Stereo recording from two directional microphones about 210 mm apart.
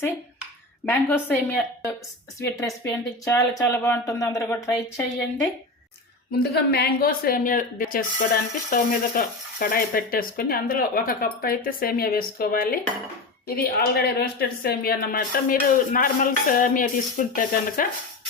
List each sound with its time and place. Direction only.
0.9 s speech: 10° left (ahead or behind)
6.4 s speech: 50° left (ahead or behind)